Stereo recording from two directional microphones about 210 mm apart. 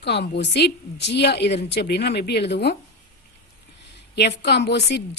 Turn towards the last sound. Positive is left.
turn(degrees=55)  # may be behind; listen again after turning